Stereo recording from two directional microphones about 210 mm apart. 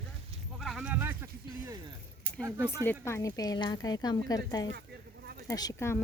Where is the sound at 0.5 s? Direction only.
Centre (ahead or behind).